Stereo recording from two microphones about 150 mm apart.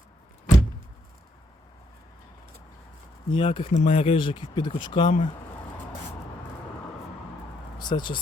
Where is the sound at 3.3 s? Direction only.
35° left (ahead or behind).